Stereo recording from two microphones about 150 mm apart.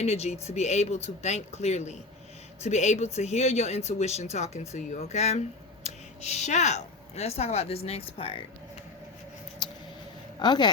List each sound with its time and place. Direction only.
0.0 s speech: 45° left (ahead or behind)
9.6 s a sound: 30° left (ahead or behind)
10.4 s speech: 30° left (ahead or behind)